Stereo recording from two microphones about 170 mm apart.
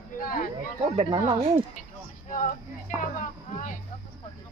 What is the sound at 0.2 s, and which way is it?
Speech, 55° left (ahead or behind).